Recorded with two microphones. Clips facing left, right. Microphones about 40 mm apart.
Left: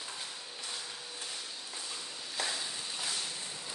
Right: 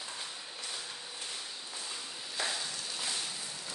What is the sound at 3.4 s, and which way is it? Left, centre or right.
Whip, left.